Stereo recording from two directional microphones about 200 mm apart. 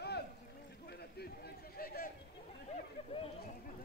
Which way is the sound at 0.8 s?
55° left (ahead or behind).